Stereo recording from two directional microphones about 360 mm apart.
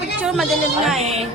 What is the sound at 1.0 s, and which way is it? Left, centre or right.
Music, centre.